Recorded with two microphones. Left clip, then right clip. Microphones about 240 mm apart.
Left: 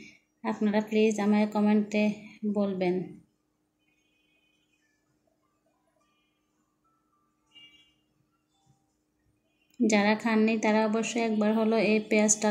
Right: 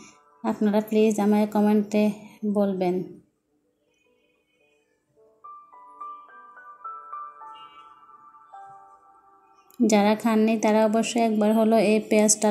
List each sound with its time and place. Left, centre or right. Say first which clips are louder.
0.4 s a woman's voice: right 5 dB; right
9.8 s a woman's voice: right 4 dB; right